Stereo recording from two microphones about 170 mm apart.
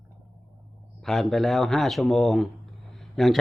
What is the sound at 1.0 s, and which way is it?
Speech, centre (ahead or behind).